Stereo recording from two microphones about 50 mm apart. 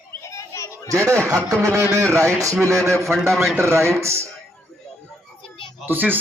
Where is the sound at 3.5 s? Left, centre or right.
Right.